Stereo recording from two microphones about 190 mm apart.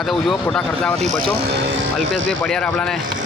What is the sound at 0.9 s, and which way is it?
Speech, 35° right (ahead or behind).